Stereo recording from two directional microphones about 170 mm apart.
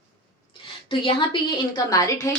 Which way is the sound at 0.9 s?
30° left (ahead or behind).